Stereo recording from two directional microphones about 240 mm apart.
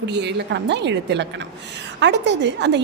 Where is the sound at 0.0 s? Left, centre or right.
Right.